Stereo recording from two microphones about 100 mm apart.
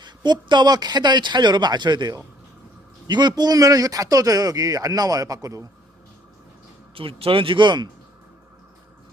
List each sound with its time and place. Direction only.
0.0 s speech: 50° right (ahead or behind)
6.9 s speech: 65° right (ahead or behind); by 7.9 s 50° right (ahead or behind)